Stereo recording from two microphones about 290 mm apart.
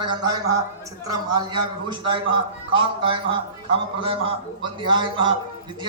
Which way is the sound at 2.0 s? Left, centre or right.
Centre.